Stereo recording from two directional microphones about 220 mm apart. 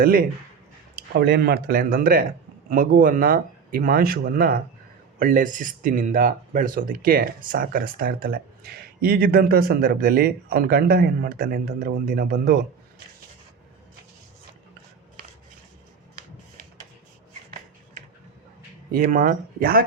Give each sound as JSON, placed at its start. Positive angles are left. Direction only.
{"t": 0.0, "sound": "speech", "side_deg": -40}
{"t": 18.9, "sound": "speech", "side_deg": -40}